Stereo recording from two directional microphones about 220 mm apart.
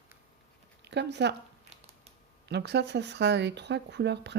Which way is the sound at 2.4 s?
50° right (ahead or behind).